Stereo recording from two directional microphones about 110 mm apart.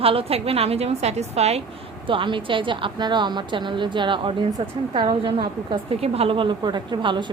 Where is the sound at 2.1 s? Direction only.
50° right (ahead or behind).